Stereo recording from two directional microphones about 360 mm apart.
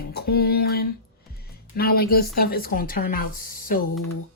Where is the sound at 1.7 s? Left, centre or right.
Left.